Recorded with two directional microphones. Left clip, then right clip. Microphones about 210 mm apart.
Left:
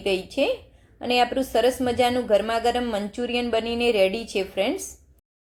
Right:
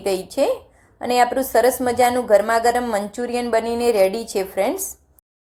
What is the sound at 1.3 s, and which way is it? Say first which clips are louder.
A woman's voice: right 5 dB; centre (ahead or behind).